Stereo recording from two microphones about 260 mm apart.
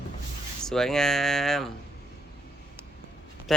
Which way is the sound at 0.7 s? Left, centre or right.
Centre.